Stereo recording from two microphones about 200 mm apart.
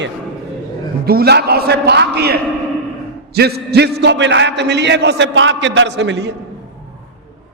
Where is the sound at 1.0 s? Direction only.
50° right (ahead or behind).